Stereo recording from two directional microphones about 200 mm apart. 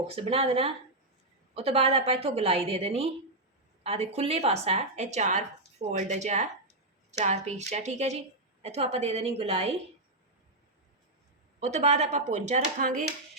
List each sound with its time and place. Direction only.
0.2 s a woman's voice: 30° right (ahead or behind)
11.6 s speech: 35° right (ahead or behind)